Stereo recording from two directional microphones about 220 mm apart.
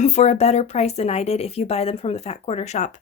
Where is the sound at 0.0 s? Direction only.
30° left (ahead or behind).